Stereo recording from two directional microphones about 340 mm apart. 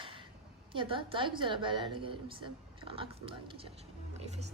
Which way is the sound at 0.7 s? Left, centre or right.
Centre.